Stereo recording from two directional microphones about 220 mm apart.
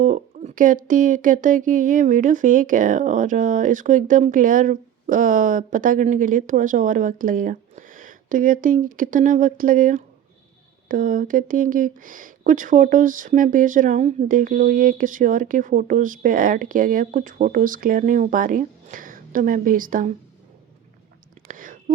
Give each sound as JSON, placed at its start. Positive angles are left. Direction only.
{"t": 0.0, "sound": "speech", "side_deg": -35}
{"t": 21.4, "sound": "whispering", "side_deg": -40}